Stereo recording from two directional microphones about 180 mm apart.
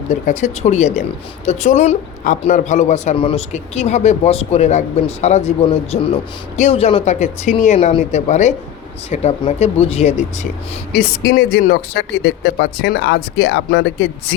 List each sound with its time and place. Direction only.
0.1 s a man's voice: 40° left (ahead or behind)
10.9 s speech: 60° left (ahead or behind); by 14.3 s 80° left